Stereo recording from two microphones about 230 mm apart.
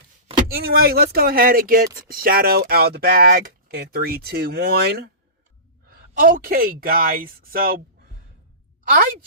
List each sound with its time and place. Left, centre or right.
0.5 s speech: right